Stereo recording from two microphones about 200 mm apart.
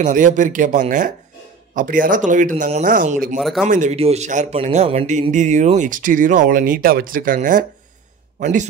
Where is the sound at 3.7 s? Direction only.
35° right (ahead or behind).